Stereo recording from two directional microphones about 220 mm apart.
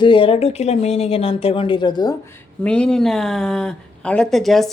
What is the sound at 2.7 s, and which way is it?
Speech, 5° left (ahead or behind).